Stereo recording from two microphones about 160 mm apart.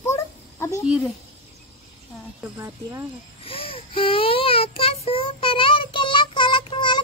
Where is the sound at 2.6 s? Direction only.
20° right (ahead or behind).